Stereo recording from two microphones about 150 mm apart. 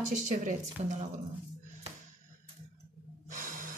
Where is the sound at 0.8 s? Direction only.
50° right (ahead or behind).